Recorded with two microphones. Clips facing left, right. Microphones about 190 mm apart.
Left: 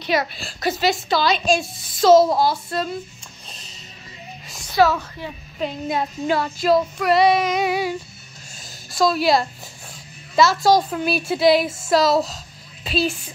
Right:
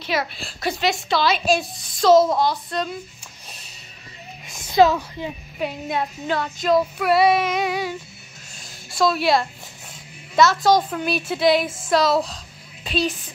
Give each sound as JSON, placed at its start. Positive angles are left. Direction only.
{"t": 0.0, "sound": "a woman's voice", "side_deg": 0}
{"t": 4.7, "sound": "a woman's voice", "side_deg": -20}
{"t": 5.6, "sound": "a woman's voice", "side_deg": -5}
{"t": 6.2, "sound": "a woman's voice", "side_deg": 10}
{"t": 8.9, "sound": "a woman's voice", "side_deg": 0}